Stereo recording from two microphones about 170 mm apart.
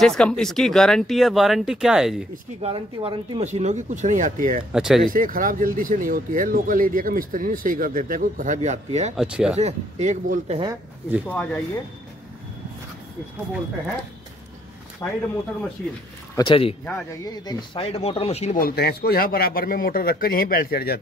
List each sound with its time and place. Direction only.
0.0 s speech: 5° left (ahead or behind)
2.6 s speech: 35° right (ahead or behind)
3.4 s speech: 40° right (ahead or behind)
4.7 s speech: 5° right (ahead or behind)
5.0 s speech: 55° right (ahead or behind)
9.1 s speech: 5° right (ahead or behind)
9.6 s speech: 40° right (ahead or behind)
11.2 s speech: 10° left (ahead or behind)
15.0 s speech: 20° left (ahead or behind)
16.3 s speech: 30° left (ahead or behind)
18.6 s a man's voice: 70° left (ahead or behind)